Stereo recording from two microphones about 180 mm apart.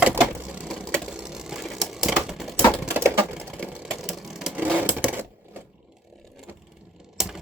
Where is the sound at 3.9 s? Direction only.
Centre (ahead or behind).